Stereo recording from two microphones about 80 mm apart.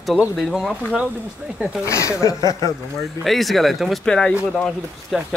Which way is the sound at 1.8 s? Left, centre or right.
Left.